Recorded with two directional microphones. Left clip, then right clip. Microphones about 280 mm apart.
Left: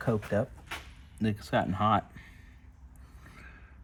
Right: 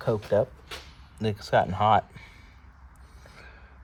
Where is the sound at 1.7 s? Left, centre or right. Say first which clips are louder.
Right 4 dB; right.